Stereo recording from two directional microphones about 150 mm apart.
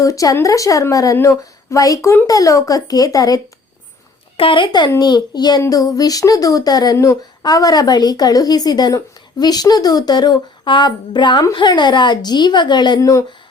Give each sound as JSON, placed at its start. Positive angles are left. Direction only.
{"t": 0.0, "sound": "a child's voice", "side_deg": 20}
{"t": 4.4, "sound": "a child's voice", "side_deg": 35}